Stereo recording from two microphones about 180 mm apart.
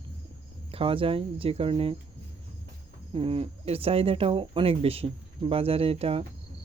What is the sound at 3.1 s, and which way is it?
Speech, 30° right (ahead or behind).